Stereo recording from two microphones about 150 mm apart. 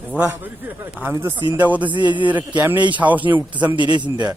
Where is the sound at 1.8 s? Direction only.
30° right (ahead or behind).